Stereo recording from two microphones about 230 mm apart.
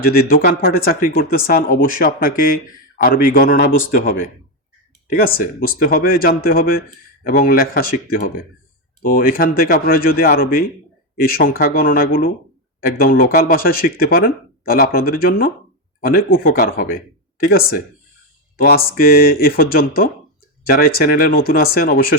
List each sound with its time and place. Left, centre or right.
0.0 s speech: left
18.5 s speech: left